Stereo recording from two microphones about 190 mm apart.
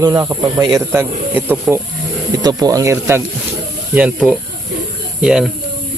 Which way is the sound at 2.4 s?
20° right (ahead or behind).